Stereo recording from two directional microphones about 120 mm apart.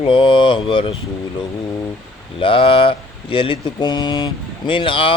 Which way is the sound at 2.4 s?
45° left (ahead or behind).